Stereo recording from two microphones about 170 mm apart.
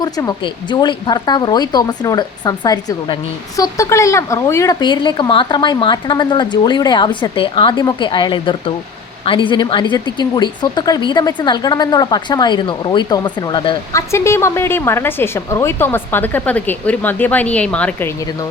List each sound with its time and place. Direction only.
0.0 s speech: 25° left (ahead or behind)
13.9 s a woman's voice: 15° left (ahead or behind)